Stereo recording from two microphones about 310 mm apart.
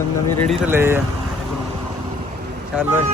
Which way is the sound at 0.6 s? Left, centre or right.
Centre.